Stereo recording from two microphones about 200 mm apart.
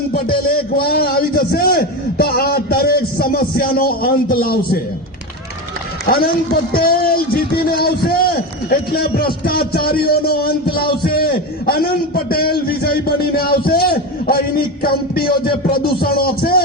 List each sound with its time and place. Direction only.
0.3 s a man's voice: 50° left (ahead or behind)
6.1 s a man's voice: 50° left (ahead or behind)